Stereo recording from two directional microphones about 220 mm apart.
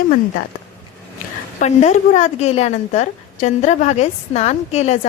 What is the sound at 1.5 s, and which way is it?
A woman's voice, 30° left (ahead or behind).